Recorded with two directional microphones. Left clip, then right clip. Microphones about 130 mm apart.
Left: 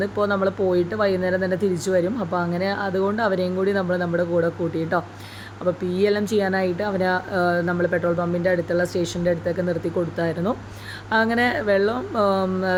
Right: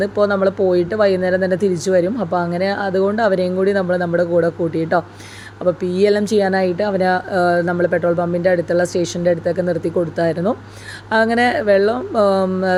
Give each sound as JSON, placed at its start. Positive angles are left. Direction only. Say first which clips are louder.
{"t": 0.0, "sound": "speech", "louder": "right 6 dB", "side_deg": -45}